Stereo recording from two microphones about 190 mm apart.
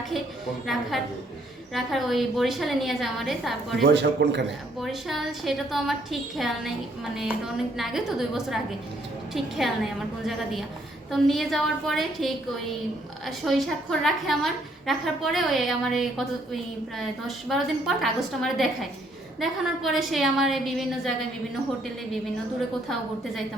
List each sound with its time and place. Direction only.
0.9 s a woman's voice: centre (ahead or behind)
3.8 s a man's voice: 65° right (ahead or behind)
4.8 s a woman's voice: centre (ahead or behind)